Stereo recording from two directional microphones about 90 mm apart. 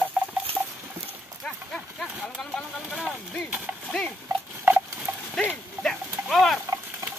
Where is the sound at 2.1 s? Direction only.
10° right (ahead or behind).